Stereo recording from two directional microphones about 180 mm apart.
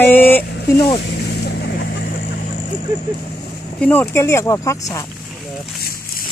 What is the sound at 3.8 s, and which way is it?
Speech, 10° left (ahead or behind).